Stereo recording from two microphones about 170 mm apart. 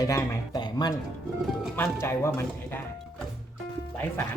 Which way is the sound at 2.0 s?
15° left (ahead or behind).